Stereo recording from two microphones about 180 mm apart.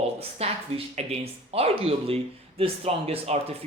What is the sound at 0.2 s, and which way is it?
Speech, 35° right (ahead or behind).